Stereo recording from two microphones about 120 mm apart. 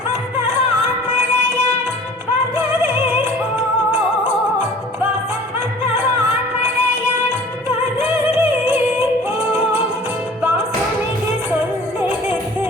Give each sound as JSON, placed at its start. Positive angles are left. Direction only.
{"t": 7.9, "sound": "music", "side_deg": -15}